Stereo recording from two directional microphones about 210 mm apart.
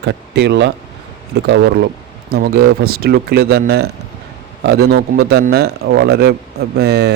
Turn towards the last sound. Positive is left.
turn(degrees=-50)  # may be behind; listen again after turning